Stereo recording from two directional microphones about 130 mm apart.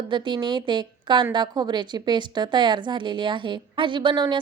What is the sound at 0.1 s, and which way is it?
A woman's voice, 35° right (ahead or behind).